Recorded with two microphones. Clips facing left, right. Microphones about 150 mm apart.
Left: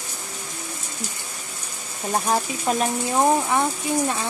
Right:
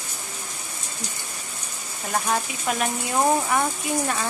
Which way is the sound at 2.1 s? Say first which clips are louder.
Left 2 dB; 35° left (ahead or behind).